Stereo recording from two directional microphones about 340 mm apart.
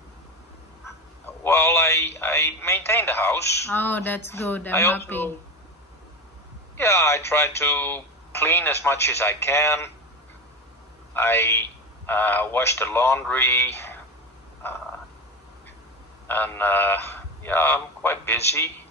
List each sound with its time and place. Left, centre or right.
0.8 s a man's voice: centre
6.8 s speech: centre
11.1 s speech: centre
16.3 s speech: centre